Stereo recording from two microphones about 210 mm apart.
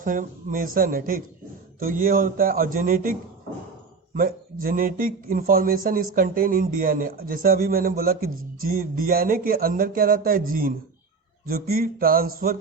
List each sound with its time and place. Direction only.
0.0 s a man's voice: 40° right (ahead or behind)